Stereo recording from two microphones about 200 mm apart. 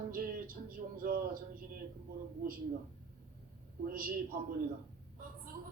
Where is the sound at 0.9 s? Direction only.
45° right (ahead or behind).